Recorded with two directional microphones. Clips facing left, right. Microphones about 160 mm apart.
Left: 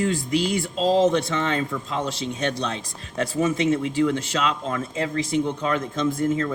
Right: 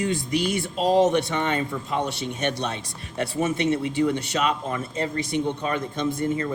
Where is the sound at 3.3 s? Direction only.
90° left.